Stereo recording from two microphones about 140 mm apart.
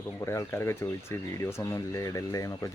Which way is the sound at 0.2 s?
20° left (ahead or behind).